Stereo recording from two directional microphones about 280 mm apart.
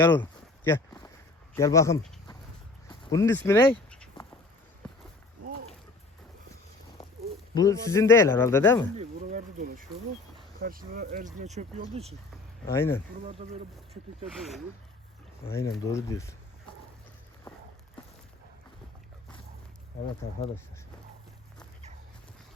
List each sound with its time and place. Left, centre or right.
0.0 s a sound: centre
1.5 s speech: centre
3.0 s a sound: centre
7.5 s speech: centre
9.0 s speech: right
12.6 s speech: centre
13.4 s speech: right
14.3 s speech: centre
15.5 s speech: centre